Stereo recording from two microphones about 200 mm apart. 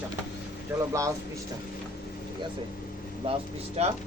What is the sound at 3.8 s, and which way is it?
Speech, 30° right (ahead or behind).